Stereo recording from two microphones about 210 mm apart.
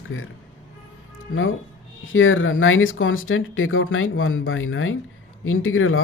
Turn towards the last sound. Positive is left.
turn(degrees=75)  # may be behind; listen again after turning